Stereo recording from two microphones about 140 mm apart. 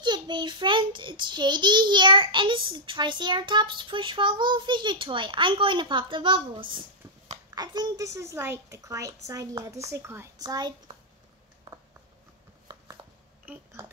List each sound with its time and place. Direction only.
0.0 s a child's voice: 35° right (ahead or behind)